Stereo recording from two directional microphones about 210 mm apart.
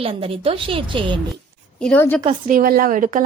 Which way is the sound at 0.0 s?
25° right (ahead or behind).